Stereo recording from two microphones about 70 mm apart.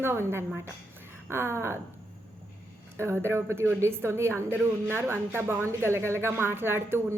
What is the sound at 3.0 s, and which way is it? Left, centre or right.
A woman's voice, right.